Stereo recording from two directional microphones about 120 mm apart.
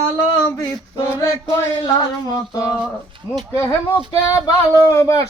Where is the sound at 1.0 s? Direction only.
25° left (ahead or behind).